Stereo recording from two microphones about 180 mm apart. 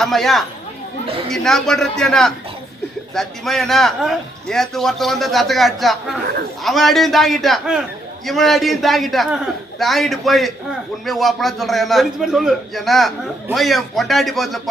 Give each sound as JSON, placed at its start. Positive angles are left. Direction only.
{"t": 0.0, "sound": "a man's voice", "side_deg": 0}